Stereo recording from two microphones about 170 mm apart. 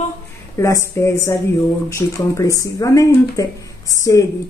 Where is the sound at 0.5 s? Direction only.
20° left (ahead or behind).